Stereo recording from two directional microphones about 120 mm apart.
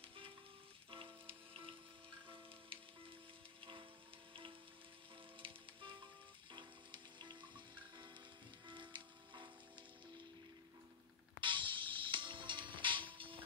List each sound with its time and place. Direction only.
0.8 s music: 45° right (ahead or behind)
5.4 s music: 45° right (ahead or behind)
11.4 s music: 45° right (ahead or behind)